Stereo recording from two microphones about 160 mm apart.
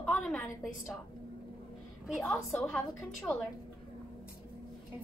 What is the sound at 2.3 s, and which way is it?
Speech, centre (ahead or behind).